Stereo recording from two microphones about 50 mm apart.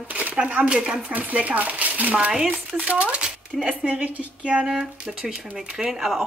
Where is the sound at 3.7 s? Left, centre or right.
Right.